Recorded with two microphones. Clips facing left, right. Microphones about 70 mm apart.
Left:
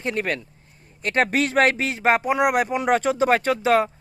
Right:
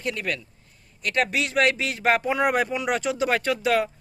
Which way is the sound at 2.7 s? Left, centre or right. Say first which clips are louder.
Left 5 dB; left.